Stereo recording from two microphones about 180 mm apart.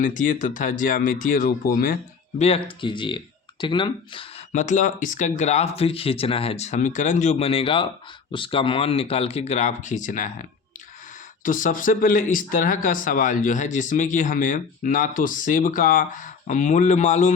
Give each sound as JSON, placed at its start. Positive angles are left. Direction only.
{"t": 0.0, "sound": "speech", "side_deg": 45}
{"t": 2.4, "sound": "speech", "side_deg": 30}
{"t": 4.5, "sound": "speech", "side_deg": 45}
{"t": 11.4, "sound": "speech", "side_deg": 45}